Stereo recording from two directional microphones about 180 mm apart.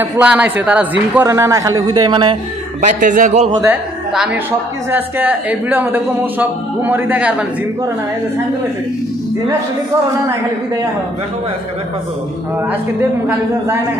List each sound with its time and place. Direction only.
0.0 s a man's voice: 5° right (ahead or behind); by 2.3 s 25° right (ahead or behind)
2.8 s speech: 45° right (ahead or behind)
3.6 s a man's voice: 5° right (ahead or behind)